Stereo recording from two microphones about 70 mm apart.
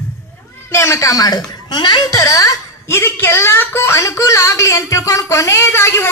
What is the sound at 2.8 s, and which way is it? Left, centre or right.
A woman's voice, left.